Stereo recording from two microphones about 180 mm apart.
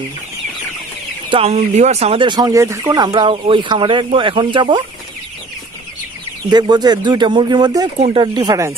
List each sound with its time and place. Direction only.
1.3 s speech: 35° right (ahead or behind)
6.5 s speech: 25° right (ahead or behind)